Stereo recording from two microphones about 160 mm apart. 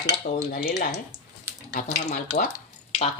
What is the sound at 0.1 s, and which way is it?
Dishes, 75° left (ahead or behind).